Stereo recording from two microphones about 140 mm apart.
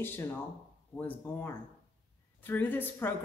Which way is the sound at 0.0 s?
15° left (ahead or behind).